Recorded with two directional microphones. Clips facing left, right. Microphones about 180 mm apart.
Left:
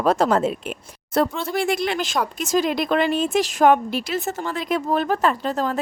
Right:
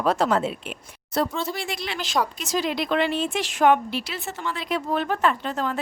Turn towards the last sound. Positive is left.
turn(degrees=40)  # may be behind; listen again after turning